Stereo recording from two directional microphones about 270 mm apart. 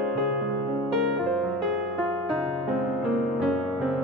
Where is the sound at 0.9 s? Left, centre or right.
Centre.